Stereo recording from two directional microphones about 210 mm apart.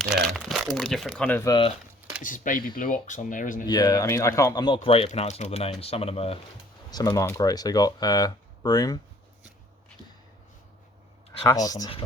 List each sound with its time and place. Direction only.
0.0 s crumpling: centre (ahead or behind)
2.2 s speech: 40° left (ahead or behind)
3.7 s speech: 20° left (ahead or behind)
6.9 s speech: 20° left (ahead or behind)
11.3 s speech: 15° left (ahead or behind)